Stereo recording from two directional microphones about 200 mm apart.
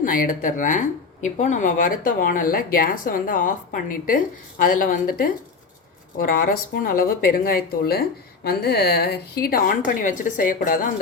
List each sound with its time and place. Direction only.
0.0 s speech: 45° left (ahead or behind)